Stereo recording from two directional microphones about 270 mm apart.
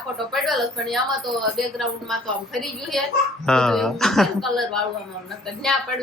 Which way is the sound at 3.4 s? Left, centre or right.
Centre.